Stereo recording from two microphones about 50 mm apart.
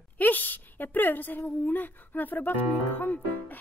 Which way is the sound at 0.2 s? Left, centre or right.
Left.